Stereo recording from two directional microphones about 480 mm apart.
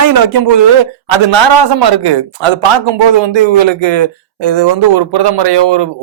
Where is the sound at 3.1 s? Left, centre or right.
Right.